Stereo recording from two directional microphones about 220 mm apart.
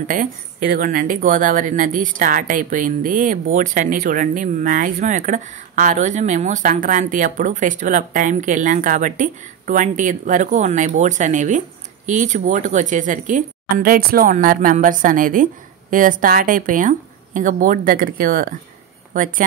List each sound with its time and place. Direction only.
0.1 s speech: 40° right (ahead or behind)